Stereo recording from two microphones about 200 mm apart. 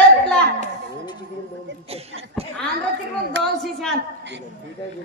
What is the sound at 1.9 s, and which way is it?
Speech, 30° right (ahead or behind).